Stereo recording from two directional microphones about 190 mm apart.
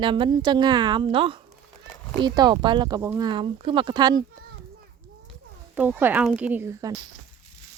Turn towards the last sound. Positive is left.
turn(degrees=-15)  # may be behind; listen again after turning